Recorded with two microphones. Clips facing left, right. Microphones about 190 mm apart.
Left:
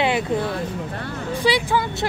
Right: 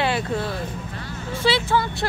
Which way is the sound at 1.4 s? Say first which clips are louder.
Even; 15° left (ahead or behind).